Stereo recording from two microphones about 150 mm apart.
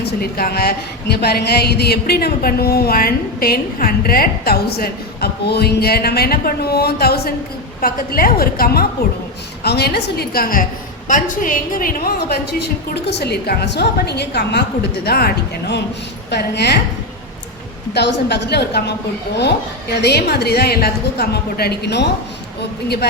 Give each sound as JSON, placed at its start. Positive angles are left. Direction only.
{"t": 0.0, "sound": "a woman's voice", "side_deg": 90}
{"t": 7.8, "sound": "a woman's voice", "side_deg": 75}
{"t": 17.9, "sound": "a woman's voice", "side_deg": 90}
{"t": 19.9, "sound": "a woman's voice", "side_deg": 90}